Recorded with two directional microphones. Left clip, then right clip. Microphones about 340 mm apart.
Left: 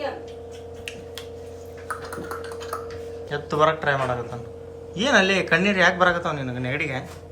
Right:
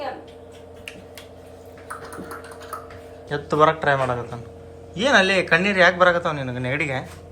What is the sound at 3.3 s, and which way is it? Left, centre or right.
A man's voice, centre.